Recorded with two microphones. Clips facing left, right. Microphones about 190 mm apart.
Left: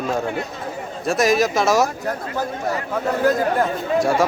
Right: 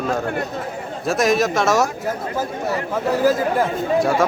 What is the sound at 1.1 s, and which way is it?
Speech, centre (ahead or behind).